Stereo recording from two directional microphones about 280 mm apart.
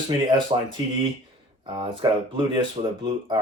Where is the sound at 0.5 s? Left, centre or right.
Centre.